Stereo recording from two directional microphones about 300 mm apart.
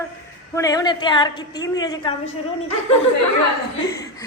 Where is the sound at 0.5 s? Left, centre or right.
Centre.